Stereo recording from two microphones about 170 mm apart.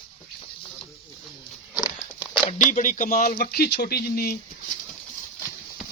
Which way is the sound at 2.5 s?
50° left (ahead or behind).